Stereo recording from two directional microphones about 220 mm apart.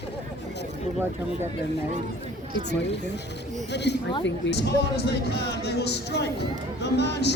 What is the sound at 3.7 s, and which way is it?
Speech, 50° left (ahead or behind).